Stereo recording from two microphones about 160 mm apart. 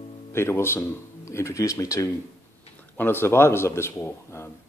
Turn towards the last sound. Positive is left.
turn(degrees=15)  # may be behind; listen again after turning